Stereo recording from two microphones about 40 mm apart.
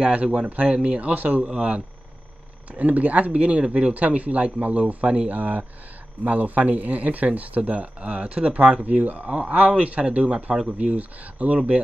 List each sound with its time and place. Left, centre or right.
0.0 s speech: right
2.7 s speech: right
5.4 s speech: right